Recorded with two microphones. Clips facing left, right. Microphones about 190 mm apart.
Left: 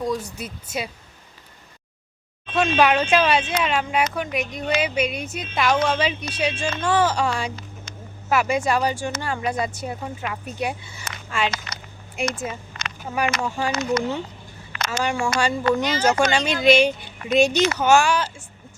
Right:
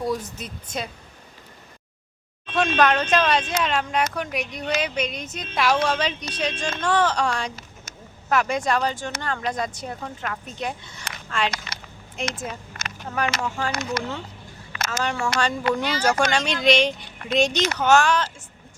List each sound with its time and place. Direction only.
0.3 s speech: 10° left (ahead or behind)
2.5 s speech: centre (ahead or behind)
15.9 s speech: 20° left (ahead or behind)
16.3 s speech: 5° left (ahead or behind)